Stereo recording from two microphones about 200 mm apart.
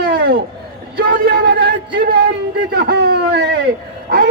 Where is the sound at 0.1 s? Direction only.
50° right (ahead or behind).